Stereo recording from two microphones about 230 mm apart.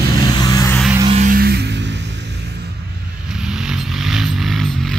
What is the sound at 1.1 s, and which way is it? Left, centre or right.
Music, right.